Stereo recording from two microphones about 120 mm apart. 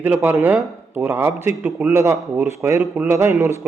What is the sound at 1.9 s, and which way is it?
Speech, 25° right (ahead or behind).